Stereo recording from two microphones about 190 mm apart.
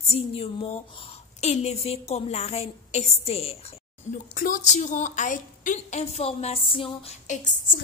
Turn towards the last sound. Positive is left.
turn(degrees=45)  # may be behind; listen again after turning